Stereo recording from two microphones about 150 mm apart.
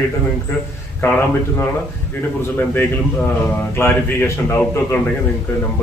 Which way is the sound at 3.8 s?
15° left (ahead or behind).